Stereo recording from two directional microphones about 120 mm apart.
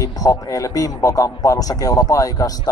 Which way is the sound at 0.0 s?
25° left (ahead or behind).